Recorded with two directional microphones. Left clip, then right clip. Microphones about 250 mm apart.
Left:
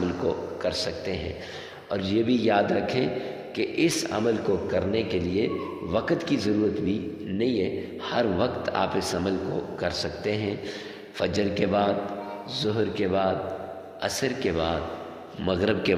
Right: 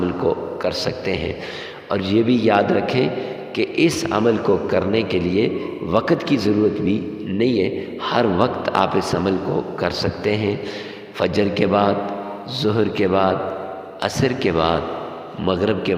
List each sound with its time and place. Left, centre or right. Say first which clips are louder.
0.3 s a man's voice: right 7 dB; right